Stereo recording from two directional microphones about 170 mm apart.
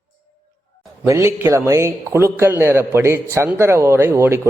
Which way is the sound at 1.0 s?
15° right (ahead or behind).